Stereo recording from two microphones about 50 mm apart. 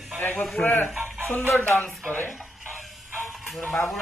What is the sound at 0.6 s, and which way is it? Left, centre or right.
Speech, left.